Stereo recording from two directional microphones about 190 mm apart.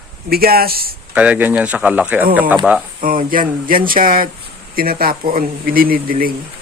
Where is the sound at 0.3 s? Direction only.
55° right (ahead or behind).